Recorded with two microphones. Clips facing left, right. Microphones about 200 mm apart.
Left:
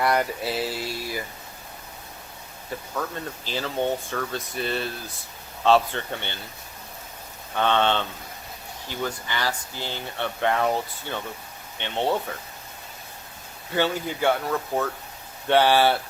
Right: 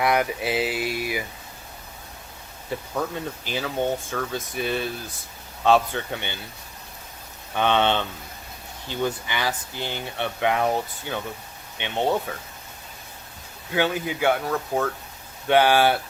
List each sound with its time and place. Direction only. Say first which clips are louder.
0.0 s speech: right 1 dB; 5° right (ahead or behind)
0.4 s speech: right 3 dB; 15° right (ahead or behind)
2.9 s speech: right 2 dB; 15° right (ahead or behind)
7.5 s speech: right 1 dB; 15° right (ahead or behind)
13.7 s speech: right 1 dB; 10° right (ahead or behind)
15.4 s speech: right 1 dB; 10° right (ahead or behind)